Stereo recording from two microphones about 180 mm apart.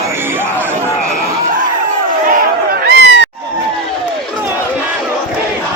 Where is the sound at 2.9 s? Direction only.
75° right (ahead or behind).